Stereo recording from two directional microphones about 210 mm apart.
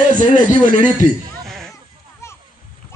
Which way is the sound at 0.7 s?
40° right (ahead or behind).